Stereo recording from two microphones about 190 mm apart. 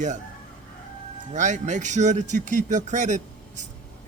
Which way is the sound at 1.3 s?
40° right (ahead or behind).